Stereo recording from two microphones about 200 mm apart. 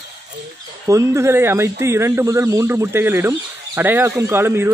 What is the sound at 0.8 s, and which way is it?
Speech, 15° right (ahead or behind).